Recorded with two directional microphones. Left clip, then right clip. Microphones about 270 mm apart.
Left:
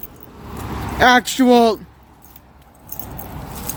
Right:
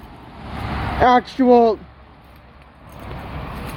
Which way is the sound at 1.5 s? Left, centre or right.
Left.